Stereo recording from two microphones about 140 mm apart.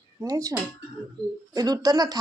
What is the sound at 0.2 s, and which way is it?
Speech, 25° right (ahead or behind).